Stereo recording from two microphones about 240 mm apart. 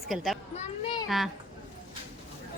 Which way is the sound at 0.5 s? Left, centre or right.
Left.